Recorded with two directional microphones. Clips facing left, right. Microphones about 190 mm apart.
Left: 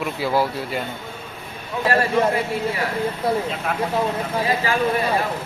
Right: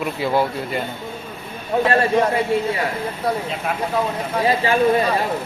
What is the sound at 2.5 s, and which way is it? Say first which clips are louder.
Speech: right 5 dB; 25° right (ahead or behind).